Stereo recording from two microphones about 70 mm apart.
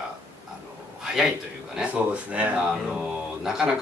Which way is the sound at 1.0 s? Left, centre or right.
Centre.